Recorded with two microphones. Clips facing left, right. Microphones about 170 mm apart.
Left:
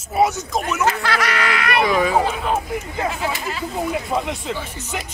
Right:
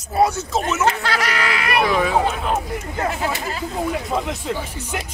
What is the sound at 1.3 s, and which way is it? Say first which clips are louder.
Speech: left 1 dB; 10° right (ahead or behind).